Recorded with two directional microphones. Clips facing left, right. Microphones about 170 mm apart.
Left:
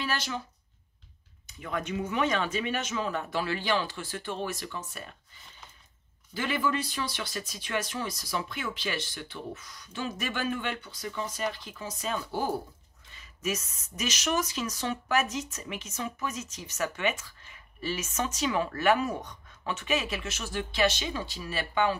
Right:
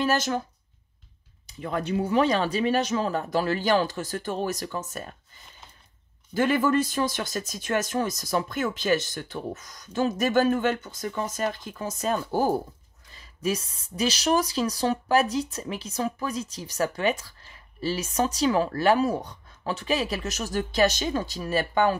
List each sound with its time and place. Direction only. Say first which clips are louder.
0.0 s speech: right 8 dB; 45° right (ahead or behind)
1.5 s speech: right 5 dB; 35° right (ahead or behind)
6.3 s speech: right 8 dB; 50° right (ahead or behind)